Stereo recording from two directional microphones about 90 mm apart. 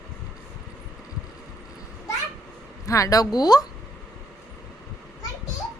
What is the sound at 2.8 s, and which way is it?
Speech, 40° left (ahead or behind).